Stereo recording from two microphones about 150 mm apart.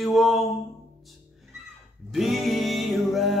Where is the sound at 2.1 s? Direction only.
Centre (ahead or behind).